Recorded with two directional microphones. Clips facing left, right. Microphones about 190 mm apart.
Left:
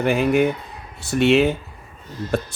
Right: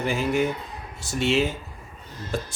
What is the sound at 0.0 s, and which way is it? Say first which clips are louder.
Speech: left 6 dB; 60° left (ahead or behind).